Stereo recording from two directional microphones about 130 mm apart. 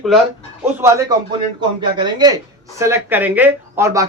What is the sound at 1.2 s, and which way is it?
Speech, 35° right (ahead or behind).